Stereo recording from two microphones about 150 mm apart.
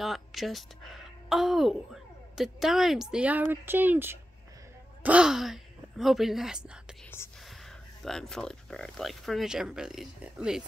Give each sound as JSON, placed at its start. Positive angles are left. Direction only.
{"t": 0.0, "sound": "a woman's voice", "side_deg": 0}